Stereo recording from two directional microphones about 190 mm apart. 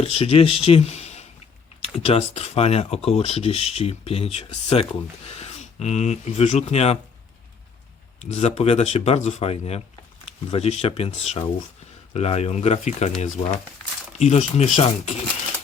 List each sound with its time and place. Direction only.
0.0 s speech: 30° left (ahead or behind)
8.2 s speech: 35° left (ahead or behind)